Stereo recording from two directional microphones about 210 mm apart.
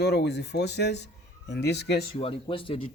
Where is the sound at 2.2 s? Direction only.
25° left (ahead or behind).